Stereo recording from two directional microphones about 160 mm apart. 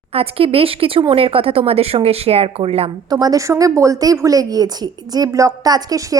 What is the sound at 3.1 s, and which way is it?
A woman's voice, 25° right (ahead or behind).